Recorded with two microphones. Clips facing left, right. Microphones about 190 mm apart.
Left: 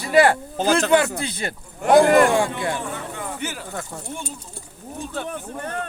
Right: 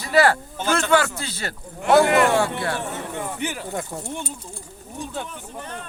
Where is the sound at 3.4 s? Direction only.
15° right (ahead or behind).